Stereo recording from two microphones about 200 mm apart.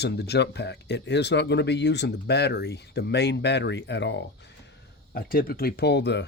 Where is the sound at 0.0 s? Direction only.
55° left (ahead or behind).